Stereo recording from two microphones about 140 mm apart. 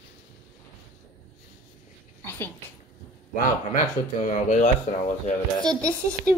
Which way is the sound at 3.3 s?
65° left (ahead or behind).